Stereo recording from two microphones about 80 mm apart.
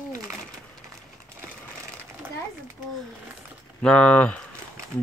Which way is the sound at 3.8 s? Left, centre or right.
Centre.